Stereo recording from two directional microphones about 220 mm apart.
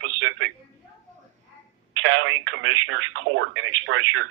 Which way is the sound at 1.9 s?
65° right (ahead or behind).